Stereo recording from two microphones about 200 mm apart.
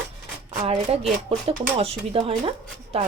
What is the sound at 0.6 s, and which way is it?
Speech, 30° right (ahead or behind).